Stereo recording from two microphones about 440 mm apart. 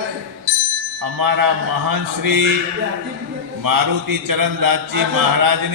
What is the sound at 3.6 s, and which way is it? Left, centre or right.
Mantra, right.